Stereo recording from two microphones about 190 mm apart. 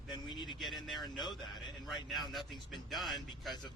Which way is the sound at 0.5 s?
Centre (ahead or behind).